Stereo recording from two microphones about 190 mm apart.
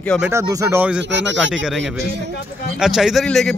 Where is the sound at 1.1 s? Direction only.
70° right (ahead or behind).